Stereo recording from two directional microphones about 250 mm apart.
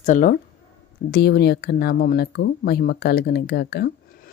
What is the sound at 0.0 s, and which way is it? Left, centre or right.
Speech, left.